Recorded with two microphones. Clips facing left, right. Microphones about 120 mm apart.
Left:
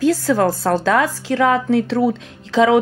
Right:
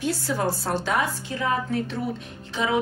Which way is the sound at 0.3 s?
90° left.